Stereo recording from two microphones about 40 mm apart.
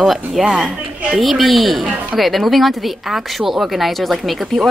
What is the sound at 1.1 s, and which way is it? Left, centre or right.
Speech, centre.